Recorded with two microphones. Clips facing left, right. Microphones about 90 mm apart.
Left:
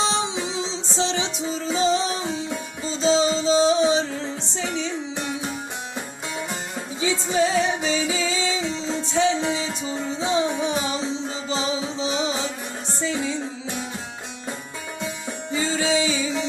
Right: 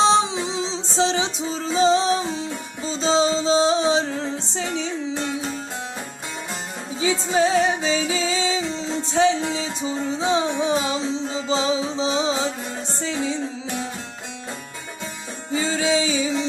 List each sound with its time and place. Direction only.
0.0 s music: 30° right (ahead or behind)
7.0 s music: 30° right (ahead or behind)
15.5 s music: 35° right (ahead or behind)